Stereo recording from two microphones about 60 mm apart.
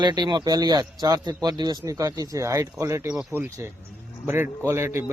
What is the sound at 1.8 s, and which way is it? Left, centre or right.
Speech, right.